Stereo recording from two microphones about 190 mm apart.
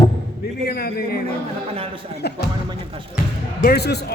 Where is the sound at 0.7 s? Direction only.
55° left (ahead or behind).